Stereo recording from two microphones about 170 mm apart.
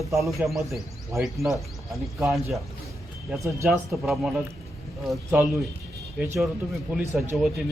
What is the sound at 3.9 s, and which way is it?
Speech, centre (ahead or behind).